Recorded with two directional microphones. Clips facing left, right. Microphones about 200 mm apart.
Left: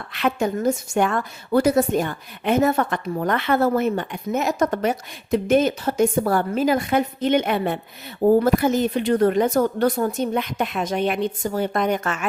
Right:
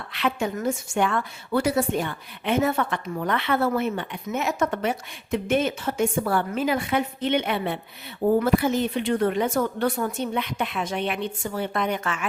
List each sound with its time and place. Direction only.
0.1 s a woman's voice: 45° left (ahead or behind)